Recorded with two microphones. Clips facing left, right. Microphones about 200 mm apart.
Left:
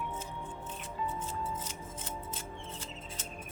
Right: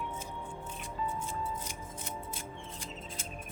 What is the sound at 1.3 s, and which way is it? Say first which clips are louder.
Scissors: even; 10° right (ahead or behind).